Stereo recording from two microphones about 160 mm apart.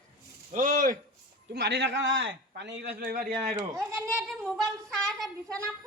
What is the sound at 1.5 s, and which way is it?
A man's voice, 90° right.